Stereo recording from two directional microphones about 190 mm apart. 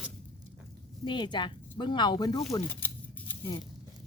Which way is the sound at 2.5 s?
10° left (ahead or behind).